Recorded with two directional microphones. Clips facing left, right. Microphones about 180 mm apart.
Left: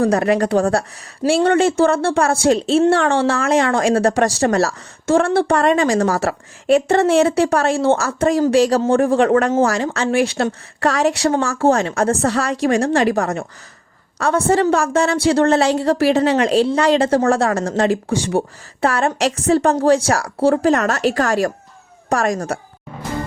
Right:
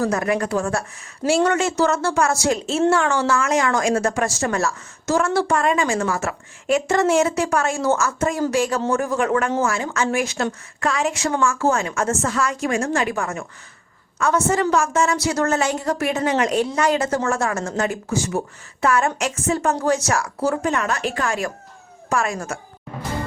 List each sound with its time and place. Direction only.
0.0 s a woman's voice: 30° left (ahead or behind)